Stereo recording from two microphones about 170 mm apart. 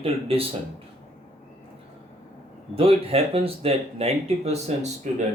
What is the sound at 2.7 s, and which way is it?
Speech, 35° right (ahead or behind).